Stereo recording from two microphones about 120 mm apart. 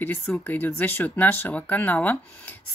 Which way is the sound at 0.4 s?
15° left (ahead or behind).